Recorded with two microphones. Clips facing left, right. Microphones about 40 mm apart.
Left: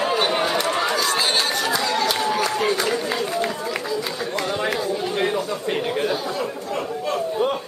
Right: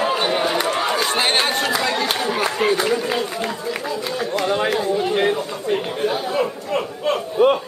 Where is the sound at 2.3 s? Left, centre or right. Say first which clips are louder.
Right 2 dB; right.